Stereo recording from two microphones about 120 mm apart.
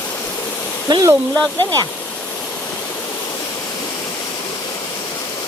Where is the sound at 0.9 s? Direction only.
30° right (ahead or behind).